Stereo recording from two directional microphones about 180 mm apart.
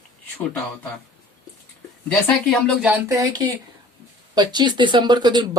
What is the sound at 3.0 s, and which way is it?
Speech, 20° right (ahead or behind).